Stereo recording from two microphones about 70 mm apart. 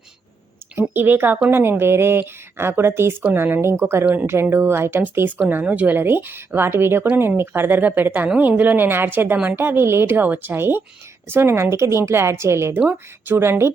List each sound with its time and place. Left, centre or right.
0.8 s a woman's voice: right
12.7 s speech: right